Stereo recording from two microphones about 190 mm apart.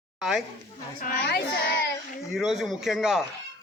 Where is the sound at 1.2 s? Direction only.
60° left (ahead or behind).